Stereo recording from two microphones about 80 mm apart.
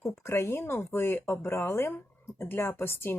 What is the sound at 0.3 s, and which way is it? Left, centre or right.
A woman's voice, left.